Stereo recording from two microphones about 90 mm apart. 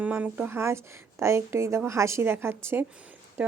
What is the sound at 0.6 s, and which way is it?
A woman's voice, 30° right (ahead or behind).